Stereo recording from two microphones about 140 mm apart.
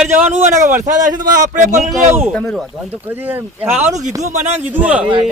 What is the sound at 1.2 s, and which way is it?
Speech, 70° right (ahead or behind).